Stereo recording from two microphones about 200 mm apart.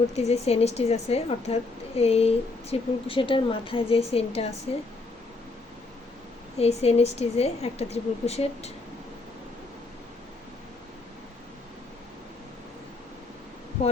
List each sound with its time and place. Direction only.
0.2 s a woman's voice: 30° left (ahead or behind)
6.6 s a woman's voice: 30° left (ahead or behind)